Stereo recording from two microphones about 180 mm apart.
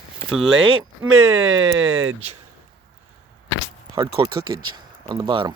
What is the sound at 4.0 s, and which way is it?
Speech, 25° right (ahead or behind).